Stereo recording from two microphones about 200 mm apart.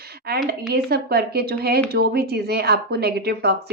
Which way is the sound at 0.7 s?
55° right (ahead or behind).